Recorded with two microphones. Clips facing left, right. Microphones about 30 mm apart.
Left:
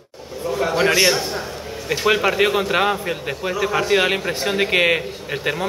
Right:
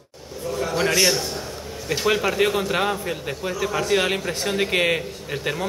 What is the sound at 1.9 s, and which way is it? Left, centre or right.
A man's voice, centre.